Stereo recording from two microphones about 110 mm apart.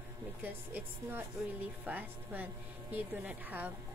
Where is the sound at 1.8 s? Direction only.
15° right (ahead or behind).